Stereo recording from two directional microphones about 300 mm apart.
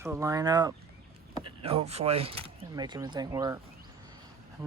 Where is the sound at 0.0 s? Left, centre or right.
Centre.